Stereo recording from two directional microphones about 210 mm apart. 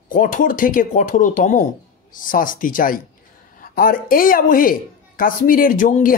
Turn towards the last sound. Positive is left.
turn(degrees=35)  # may be behind; listen again after turning